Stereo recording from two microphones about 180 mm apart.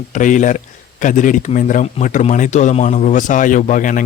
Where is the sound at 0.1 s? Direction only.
45° left (ahead or behind).